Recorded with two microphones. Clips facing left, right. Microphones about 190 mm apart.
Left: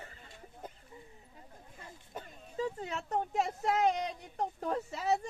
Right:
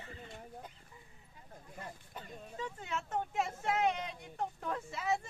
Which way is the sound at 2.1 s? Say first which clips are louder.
Left 4 dB; 35° left (ahead or behind).